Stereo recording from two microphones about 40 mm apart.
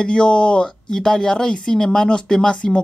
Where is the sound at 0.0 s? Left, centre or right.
Left.